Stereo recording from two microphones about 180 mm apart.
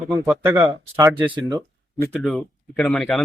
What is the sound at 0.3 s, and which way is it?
Speech, 15° right (ahead or behind).